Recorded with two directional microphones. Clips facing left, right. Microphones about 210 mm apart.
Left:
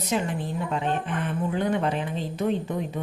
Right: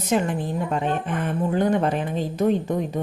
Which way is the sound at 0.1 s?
45° right (ahead or behind).